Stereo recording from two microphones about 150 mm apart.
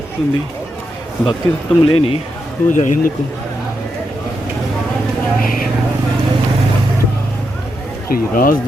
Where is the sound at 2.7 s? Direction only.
60° left (ahead or behind).